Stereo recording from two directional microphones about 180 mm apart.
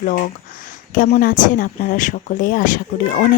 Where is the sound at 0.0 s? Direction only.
50° left (ahead or behind).